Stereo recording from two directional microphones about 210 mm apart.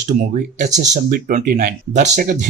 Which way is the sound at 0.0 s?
35° right (ahead or behind).